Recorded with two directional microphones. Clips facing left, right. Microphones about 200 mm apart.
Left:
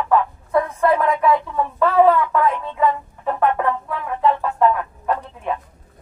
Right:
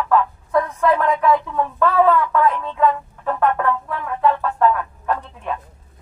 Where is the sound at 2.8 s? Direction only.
10° left (ahead or behind).